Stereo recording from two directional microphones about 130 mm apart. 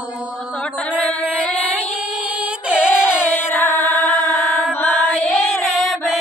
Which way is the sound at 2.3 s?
10° right (ahead or behind).